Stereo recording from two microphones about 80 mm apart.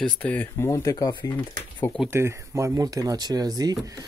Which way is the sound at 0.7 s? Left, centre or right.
Left.